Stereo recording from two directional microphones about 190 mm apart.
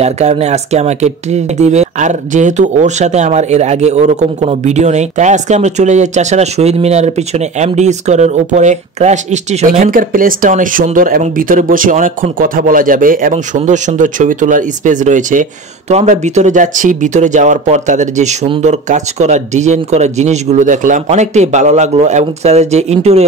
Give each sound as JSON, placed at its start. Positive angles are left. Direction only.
{"t": 0.0, "sound": "speech", "side_deg": -35}